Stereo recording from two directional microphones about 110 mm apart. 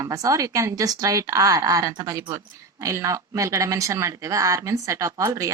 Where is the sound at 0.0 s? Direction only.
30° right (ahead or behind).